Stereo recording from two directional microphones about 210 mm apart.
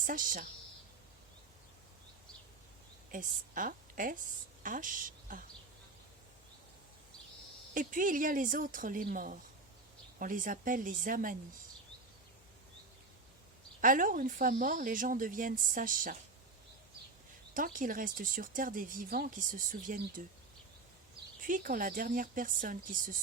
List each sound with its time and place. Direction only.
0.0 s speech: 40° right (ahead or behind)
3.1 s a woman's voice: 40° right (ahead or behind)
7.7 s speech: 40° right (ahead or behind)
13.8 s speech: 40° right (ahead or behind)
17.5 s speech: 40° right (ahead or behind)
21.4 s speech: 40° right (ahead or behind)